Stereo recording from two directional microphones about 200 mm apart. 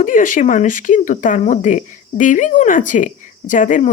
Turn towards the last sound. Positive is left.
turn(degrees=40)  # may be behind; listen again after turning